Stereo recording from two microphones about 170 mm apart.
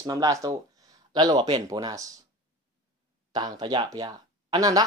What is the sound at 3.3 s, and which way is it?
Speech, 25° right (ahead or behind).